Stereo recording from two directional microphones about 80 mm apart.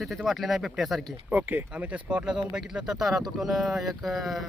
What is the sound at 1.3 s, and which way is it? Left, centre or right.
Speech, right.